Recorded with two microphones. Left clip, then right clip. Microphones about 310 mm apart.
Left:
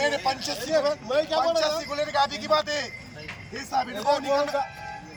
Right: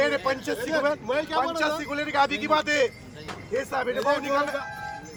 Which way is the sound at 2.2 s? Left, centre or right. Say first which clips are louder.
Right 1 dB; centre.